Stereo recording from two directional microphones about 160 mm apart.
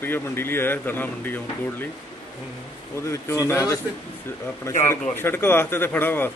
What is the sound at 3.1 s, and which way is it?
A man's voice, 15° left (ahead or behind).